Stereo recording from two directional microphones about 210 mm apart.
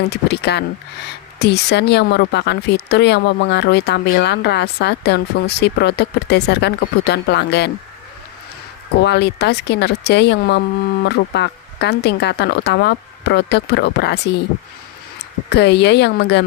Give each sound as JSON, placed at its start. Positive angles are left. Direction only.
{"t": 0.1, "sound": "speech", "side_deg": 55}
{"t": 9.0, "sound": "speech", "side_deg": 55}